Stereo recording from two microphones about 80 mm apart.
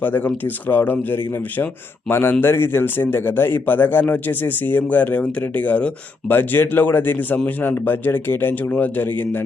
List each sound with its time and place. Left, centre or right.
0.0 s speech: left